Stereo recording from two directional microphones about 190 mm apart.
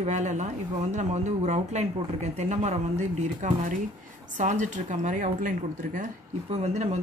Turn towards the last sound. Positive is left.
turn(degrees=-35)  # may be behind; listen again after turning